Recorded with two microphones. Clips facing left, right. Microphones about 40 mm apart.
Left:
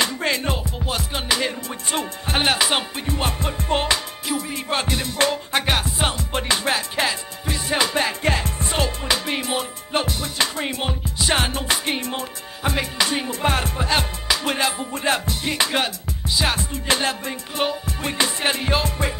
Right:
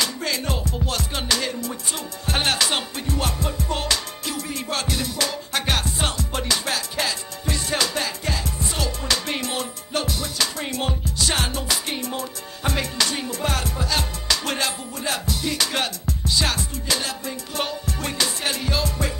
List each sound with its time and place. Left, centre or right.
0.0 s music: left
8.2 s music: left
9.0 s music: centre
9.9 s music: left
12.6 s music: centre; by 14.0 s left
14.2 s music: centre
14.8 s music: left
15.7 s music: centre
16.7 s music: left
17.6 s music: centre